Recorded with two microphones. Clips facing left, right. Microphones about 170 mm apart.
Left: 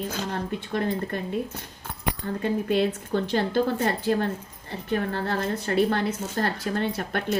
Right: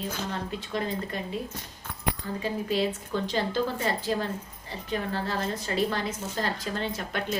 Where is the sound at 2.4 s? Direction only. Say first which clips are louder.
Left 4 dB; 55° left (ahead or behind).